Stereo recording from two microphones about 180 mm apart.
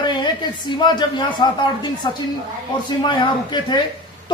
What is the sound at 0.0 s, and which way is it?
A woman's voice, 25° left (ahead or behind).